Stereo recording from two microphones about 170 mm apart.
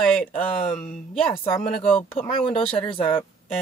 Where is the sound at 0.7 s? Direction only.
5° left (ahead or behind).